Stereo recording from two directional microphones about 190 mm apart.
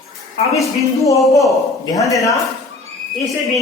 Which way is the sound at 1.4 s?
15° left (ahead or behind).